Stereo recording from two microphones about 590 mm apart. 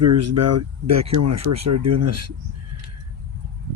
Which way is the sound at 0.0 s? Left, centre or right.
Right.